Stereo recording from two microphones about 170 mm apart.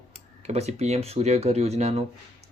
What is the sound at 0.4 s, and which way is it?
Speech, 40° right (ahead or behind).